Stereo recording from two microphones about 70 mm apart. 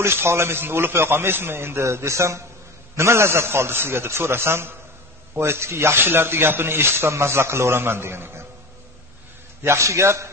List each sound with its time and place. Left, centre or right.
0.0 s a man's voice: right
9.6 s a man's voice: right